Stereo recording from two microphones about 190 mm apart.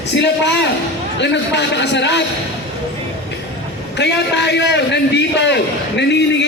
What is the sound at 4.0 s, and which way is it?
A man's voice, 65° left (ahead or behind).